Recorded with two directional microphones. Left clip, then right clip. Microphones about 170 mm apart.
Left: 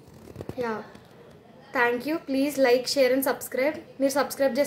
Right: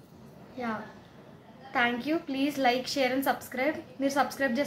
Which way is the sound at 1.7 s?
90° left.